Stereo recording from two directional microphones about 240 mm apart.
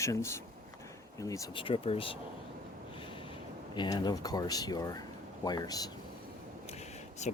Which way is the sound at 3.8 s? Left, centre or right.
Centre.